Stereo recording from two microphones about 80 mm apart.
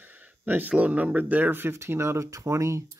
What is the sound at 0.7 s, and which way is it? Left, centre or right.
Speech, centre.